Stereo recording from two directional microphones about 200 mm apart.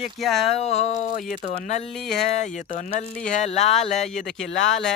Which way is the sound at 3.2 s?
35° left (ahead or behind).